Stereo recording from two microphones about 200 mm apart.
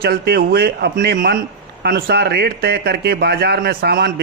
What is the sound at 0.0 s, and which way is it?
Speech, 50° right (ahead or behind).